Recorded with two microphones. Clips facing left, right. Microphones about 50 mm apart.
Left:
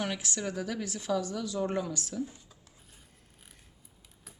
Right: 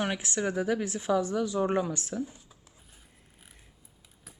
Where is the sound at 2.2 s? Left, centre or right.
Centre.